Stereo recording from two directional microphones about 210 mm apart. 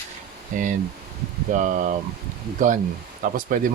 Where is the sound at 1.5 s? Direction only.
35° right (ahead or behind).